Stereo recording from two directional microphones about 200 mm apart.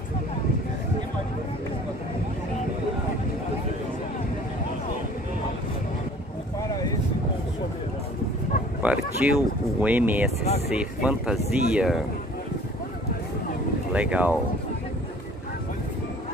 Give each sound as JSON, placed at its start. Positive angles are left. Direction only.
{"t": 6.7, "sound": "vehicle", "side_deg": 15}
{"t": 8.8, "sound": "a sound", "side_deg": -5}
{"t": 9.2, "sound": "speech", "side_deg": -5}
{"t": 13.9, "sound": "speech", "side_deg": -5}